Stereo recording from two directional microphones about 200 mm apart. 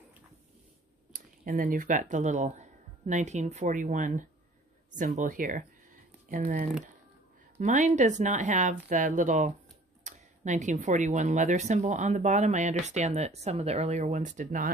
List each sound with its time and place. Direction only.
1.1 s speech: 45° right (ahead or behind)